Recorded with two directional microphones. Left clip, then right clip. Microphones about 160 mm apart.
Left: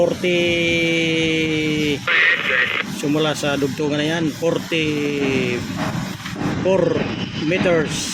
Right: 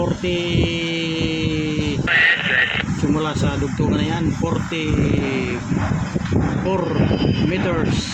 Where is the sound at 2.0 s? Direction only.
25° right (ahead or behind).